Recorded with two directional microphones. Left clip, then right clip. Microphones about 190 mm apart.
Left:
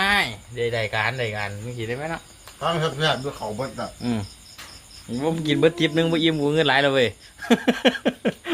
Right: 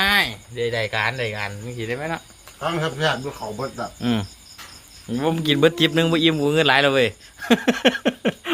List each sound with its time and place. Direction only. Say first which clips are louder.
0.0 s speech: right 2 dB; 10° right (ahead or behind)
2.6 s a man's voice: even; centre (ahead or behind)
4.0 s cricket: right 5 dB; 30° right (ahead or behind)
5.1 s a man's voice: right 2 dB; 25° right (ahead or behind); by 8.4 s 10° right (ahead or behind)